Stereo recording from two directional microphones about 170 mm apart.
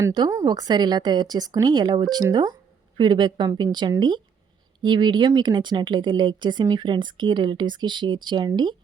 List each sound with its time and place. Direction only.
0.0 s speech: 20° right (ahead or behind)